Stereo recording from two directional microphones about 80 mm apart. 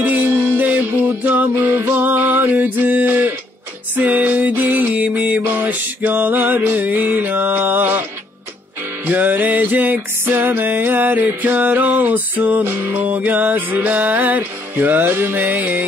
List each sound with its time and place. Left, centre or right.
0.0 s music: right
9.0 s music: right